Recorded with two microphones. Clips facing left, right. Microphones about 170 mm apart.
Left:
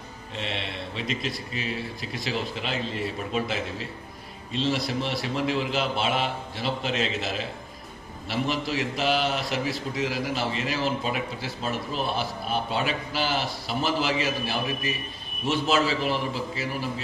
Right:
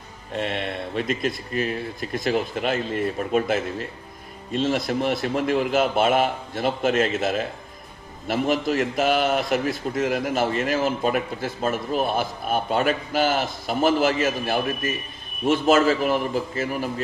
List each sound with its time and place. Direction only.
0.3 s a man's voice: 50° right (ahead or behind)